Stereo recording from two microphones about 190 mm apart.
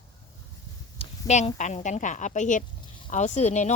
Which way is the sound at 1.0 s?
35° left (ahead or behind).